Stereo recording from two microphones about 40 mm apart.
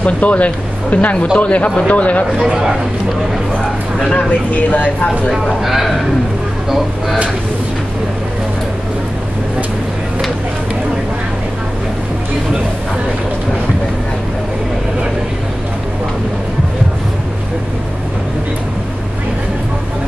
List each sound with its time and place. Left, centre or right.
0.0 s speech: left
2.3 s a man's voice: centre
4.3 s speech: left
5.3 s speech: centre